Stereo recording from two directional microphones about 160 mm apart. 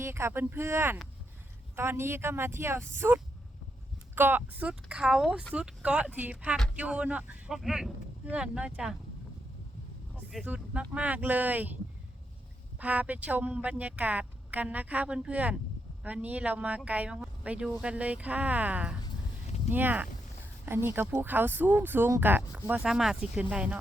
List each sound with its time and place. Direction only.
0.0 s speech: 15° right (ahead or behind)
10.3 s speech: 10° right (ahead or behind)
12.8 s speech: 10° right (ahead or behind)